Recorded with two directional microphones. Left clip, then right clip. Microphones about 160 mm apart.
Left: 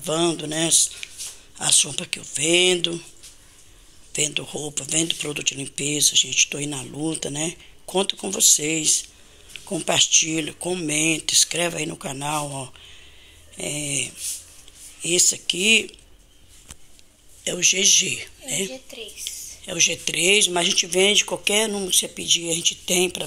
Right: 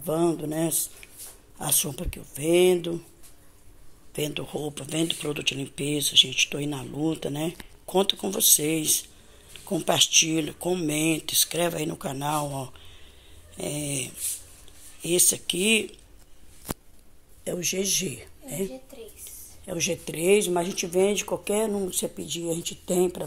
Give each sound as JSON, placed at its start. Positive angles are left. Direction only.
{"t": 0.0, "sound": "speech", "side_deg": -10}
{"t": 4.1, "sound": "speech", "side_deg": -10}
{"t": 17.4, "sound": "speech", "side_deg": -10}